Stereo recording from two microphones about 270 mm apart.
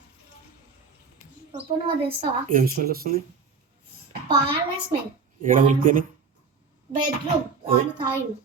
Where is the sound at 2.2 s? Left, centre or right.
Right.